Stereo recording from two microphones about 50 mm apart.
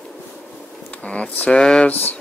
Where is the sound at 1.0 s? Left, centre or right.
Left.